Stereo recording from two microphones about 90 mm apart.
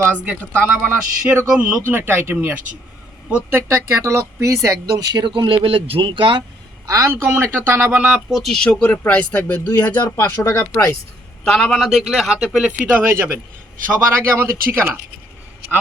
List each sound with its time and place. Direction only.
0.1 s speech: 15° right (ahead or behind); by 5.3 s 50° right (ahead or behind)
5.3 s speech: 75° right (ahead or behind)
5.6 s speech: 90° right; by 6.4 s 65° right (ahead or behind)
6.8 s speech: 35° right (ahead or behind)
7.1 s speech: 25° right (ahead or behind)
8.3 s speech: centre (ahead or behind); by 10.6 s 30° left (ahead or behind)
11.4 s speech: 5° left (ahead or behind)
12.8 s speech: 20° right (ahead or behind)